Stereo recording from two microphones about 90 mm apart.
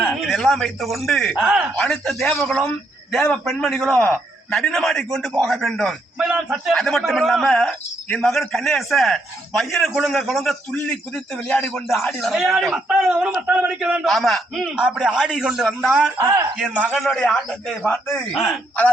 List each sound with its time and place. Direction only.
0.0 s a man's voice: 5° left (ahead or behind)
6.1 s a man's voice: 10° right (ahead or behind)
6.7 s a man's voice: 5° left (ahead or behind)
12.3 s a man's voice: centre (ahead or behind)
14.0 s a man's voice: centre (ahead or behind)
14.6 s a man's voice: 10° right (ahead or behind)
16.2 s a man's voice: 40° right (ahead or behind)
16.6 s a man's voice: 10° right (ahead or behind); by 17.7 s 5° left (ahead or behind)
17.8 s a man's voice: 15° left (ahead or behind)